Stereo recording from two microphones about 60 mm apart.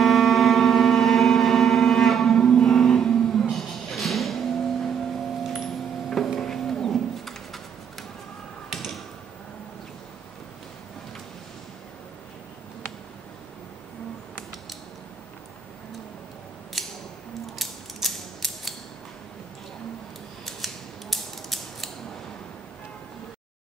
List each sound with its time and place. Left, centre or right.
0.0 s civil defense siren: centre
6.0 s livestock: centre
8.6 s a sound: centre
16.8 s scissors: centre
17.6 s mechanisms: centre
20.4 s mechanisms: centre